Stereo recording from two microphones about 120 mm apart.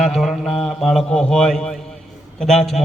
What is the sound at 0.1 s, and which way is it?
A man's voice, centre (ahead or behind).